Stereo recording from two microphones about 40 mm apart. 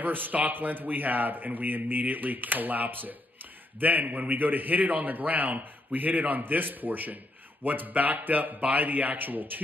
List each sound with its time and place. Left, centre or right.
0.0 s speech: right